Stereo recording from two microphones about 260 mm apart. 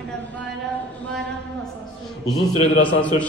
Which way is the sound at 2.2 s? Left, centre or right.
Centre.